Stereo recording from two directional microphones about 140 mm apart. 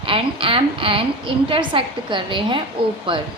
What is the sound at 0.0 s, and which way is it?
A woman's voice, 40° right (ahead or behind).